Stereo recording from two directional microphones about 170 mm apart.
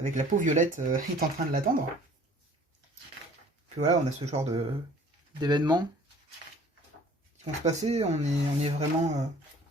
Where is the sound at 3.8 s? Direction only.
45° right (ahead or behind).